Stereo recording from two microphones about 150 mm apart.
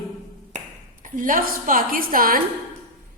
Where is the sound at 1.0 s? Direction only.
65° right (ahead or behind).